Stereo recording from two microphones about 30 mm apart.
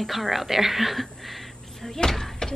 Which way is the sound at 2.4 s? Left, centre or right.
Left.